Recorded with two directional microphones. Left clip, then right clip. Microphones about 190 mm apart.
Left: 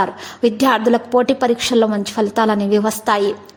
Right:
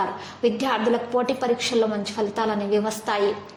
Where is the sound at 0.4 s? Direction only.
45° left (ahead or behind).